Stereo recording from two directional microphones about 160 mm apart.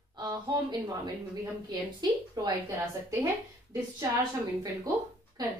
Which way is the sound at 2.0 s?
25° right (ahead or behind).